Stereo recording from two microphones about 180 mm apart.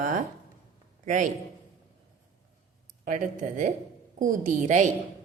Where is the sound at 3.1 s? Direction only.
45° right (ahead or behind).